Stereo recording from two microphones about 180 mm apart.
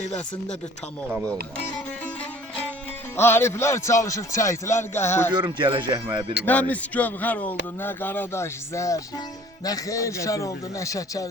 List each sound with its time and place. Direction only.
3.2 s a man's voice: 15° left (ahead or behind)
5.3 s speech: 25° right (ahead or behind)
6.4 s a man's voice: 10° left (ahead or behind)